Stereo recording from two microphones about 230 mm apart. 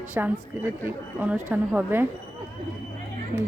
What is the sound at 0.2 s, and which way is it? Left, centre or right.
A woman's voice, centre.